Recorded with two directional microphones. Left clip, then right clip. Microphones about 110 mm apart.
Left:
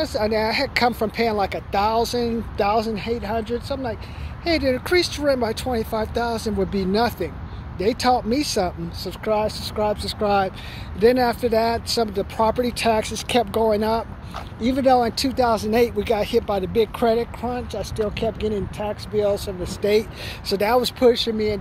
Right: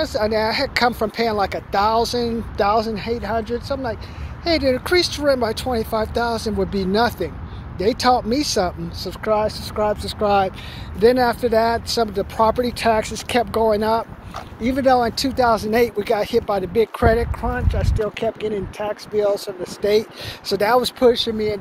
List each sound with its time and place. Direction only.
0.0 s speech: 20° left (ahead or behind)
6.6 s speech: 20° left (ahead or behind)
6.9 s speech: 5° left (ahead or behind)
15.4 s speech: 5° left (ahead or behind)
16.6 s speech: 55° right (ahead or behind)
16.9 s speech: 15° left (ahead or behind)
18.8 s speech: 15° left (ahead or behind)
20.8 s speech: 25° left (ahead or behind)